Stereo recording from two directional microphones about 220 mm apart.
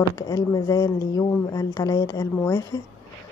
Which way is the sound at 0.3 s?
15° left (ahead or behind).